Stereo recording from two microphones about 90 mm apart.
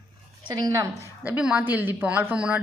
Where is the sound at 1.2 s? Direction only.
15° right (ahead or behind).